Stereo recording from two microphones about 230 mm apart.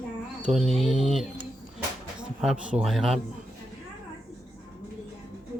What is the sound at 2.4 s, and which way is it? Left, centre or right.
Speech, centre.